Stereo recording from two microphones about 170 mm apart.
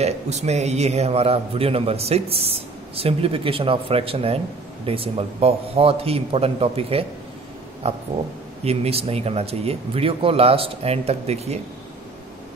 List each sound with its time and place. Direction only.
0.0 s a man's voice: 40° right (ahead or behind)